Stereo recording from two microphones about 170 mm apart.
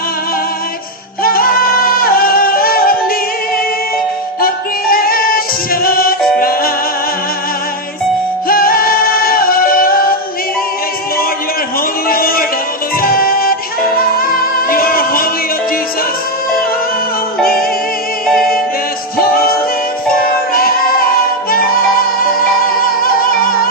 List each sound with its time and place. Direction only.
1.2 s yodeling: 60° left (ahead or behind)
4.4 s music: 60° left (ahead or behind)
8.4 s music: 60° left (ahead or behind)
12.0 s a sound: 60° left (ahead or behind)
13.0 s music: 60° left (ahead or behind)
17.4 s music: 60° left (ahead or behind)
18.3 s music: centre (ahead or behind)
19.1 s music: 60° left (ahead or behind)